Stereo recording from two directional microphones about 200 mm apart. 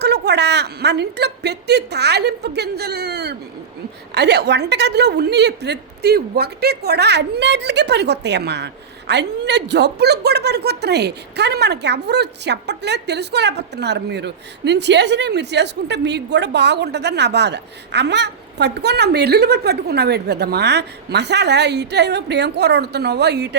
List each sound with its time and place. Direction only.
0.0 s a woman's voice: 55° right (ahead or behind)